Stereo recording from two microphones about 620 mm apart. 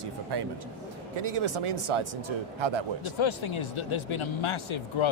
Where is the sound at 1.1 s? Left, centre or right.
Right.